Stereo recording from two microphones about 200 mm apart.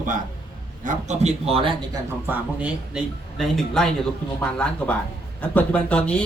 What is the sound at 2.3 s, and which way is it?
A man's voice, 5° right (ahead or behind).